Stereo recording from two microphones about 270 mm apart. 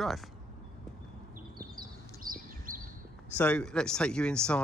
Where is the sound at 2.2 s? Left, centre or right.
Right.